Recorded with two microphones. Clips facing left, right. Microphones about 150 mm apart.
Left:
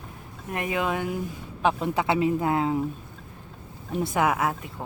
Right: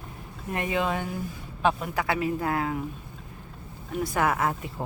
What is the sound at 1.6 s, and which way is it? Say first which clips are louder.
Speech: left 2 dB; 20° left (ahead or behind).